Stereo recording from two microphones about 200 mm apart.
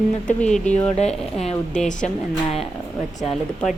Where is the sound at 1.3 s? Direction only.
30° left (ahead or behind).